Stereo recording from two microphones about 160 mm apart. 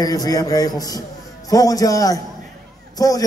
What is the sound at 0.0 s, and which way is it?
A man's voice, 25° left (ahead or behind).